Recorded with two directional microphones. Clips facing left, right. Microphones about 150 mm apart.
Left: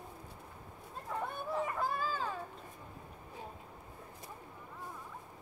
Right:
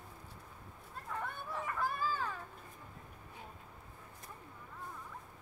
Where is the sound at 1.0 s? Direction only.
25° left (ahead or behind).